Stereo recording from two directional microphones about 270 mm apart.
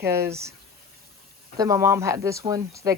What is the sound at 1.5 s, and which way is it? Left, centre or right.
Speech, centre.